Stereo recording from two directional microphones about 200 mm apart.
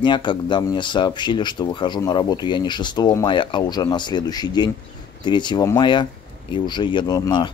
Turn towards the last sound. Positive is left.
turn(degrees=20)  # may be behind; listen again after turning